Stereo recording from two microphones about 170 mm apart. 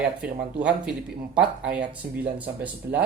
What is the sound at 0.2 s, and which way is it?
Speech, 5° right (ahead or behind).